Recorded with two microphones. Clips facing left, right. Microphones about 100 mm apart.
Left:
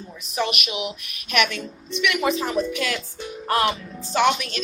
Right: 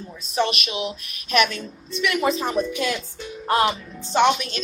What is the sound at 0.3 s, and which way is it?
A woman's voice, 30° right (ahead or behind).